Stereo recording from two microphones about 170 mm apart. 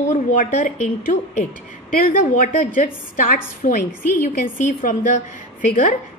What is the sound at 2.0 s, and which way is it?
A woman's voice, 55° left (ahead or behind).